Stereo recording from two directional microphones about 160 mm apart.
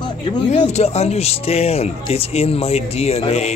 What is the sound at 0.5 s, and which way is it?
Speech, 45° left (ahead or behind).